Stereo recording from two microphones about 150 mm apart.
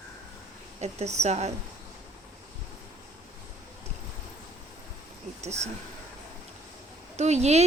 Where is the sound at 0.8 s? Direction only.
45° right (ahead or behind).